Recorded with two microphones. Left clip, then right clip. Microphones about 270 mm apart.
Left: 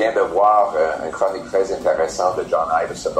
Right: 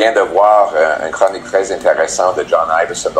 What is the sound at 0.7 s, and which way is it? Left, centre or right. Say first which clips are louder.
Speech: right 6 dB; right.